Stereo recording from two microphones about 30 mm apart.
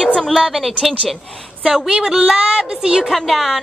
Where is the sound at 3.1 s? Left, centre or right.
Centre.